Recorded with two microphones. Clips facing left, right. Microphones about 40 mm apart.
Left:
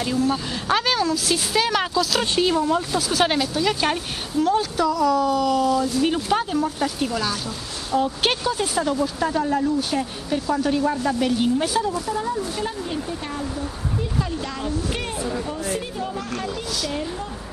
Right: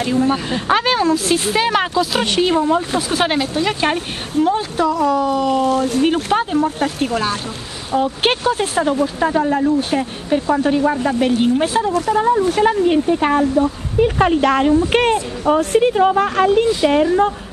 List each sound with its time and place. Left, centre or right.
0.0 s speech: right
5.7 s speech: right
6.3 s speech: right
11.9 s speech: right